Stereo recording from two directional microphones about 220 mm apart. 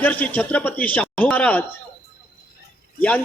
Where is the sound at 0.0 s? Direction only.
5° left (ahead or behind).